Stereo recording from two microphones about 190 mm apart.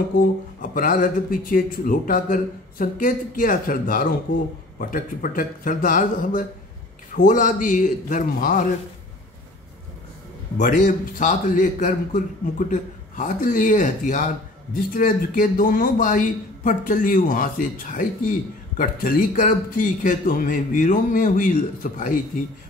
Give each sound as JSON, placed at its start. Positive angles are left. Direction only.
{"t": 0.6, "sound": "a man's voice", "side_deg": 45}
{"t": 10.6, "sound": "a man's voice", "side_deg": 40}